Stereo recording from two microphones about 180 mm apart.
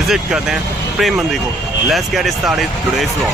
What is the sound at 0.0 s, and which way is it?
Speech, centre (ahead or behind).